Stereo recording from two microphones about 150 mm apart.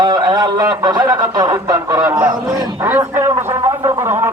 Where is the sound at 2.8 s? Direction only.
15° right (ahead or behind).